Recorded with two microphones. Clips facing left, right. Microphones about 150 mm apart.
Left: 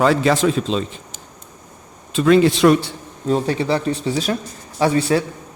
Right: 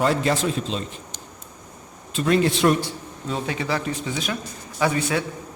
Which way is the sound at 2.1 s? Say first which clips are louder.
Left 7 dB; 90° left.